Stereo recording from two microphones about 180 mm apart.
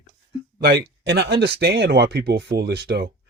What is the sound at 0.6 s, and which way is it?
Speech, 65° right (ahead or behind).